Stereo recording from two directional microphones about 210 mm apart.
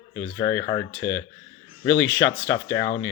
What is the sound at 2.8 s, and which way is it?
Speech, 60° left (ahead or behind).